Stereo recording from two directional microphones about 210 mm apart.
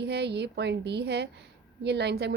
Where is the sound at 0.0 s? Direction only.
50° right (ahead or behind).